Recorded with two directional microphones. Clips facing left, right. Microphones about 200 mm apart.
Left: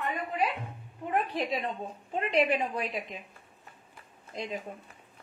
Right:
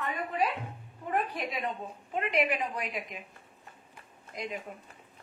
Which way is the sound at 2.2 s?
30° left (ahead or behind).